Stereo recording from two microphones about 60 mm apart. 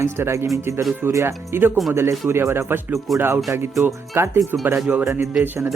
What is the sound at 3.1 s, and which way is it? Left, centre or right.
Speech, centre.